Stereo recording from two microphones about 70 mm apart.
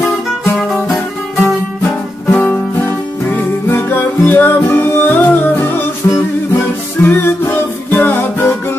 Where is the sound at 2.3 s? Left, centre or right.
Centre.